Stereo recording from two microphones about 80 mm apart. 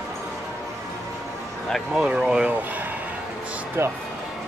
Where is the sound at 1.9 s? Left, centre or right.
Centre.